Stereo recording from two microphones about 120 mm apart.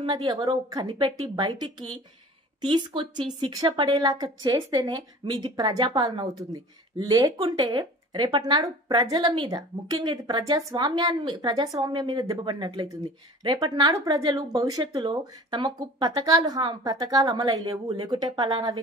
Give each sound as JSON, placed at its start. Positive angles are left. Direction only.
{"t": 0.0, "sound": "speech", "side_deg": -35}
{"t": 0.8, "sound": "speech", "side_deg": -45}
{"t": 1.4, "sound": "speech", "side_deg": -35}